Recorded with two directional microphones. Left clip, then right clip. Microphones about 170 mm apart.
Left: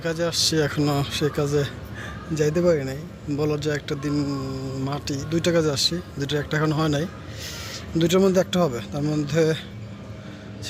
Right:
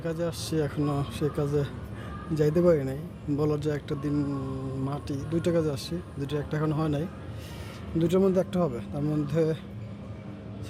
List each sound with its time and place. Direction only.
0.0 s speech: 5° right (ahead or behind)